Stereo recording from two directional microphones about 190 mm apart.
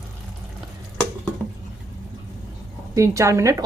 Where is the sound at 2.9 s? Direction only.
15° right (ahead or behind).